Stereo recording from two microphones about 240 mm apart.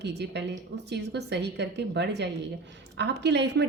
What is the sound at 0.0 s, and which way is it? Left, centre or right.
A woman's voice, right.